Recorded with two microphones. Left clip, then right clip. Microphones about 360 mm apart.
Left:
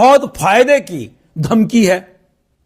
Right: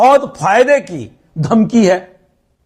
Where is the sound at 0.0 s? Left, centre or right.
Centre.